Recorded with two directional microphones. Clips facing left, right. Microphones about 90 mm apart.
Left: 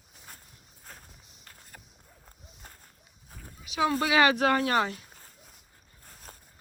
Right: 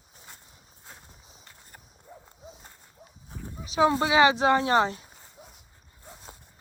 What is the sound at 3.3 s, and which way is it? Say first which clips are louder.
Dog: right 9 dB; 20° right (ahead or behind).